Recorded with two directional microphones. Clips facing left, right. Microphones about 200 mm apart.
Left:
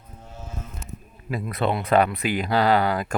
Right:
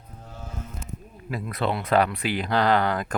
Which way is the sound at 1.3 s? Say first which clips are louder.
Left 2 dB; 20° left (ahead or behind).